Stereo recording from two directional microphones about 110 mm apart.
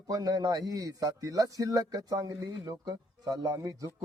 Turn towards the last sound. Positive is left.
turn(degrees=-35)  # may be behind; listen again after turning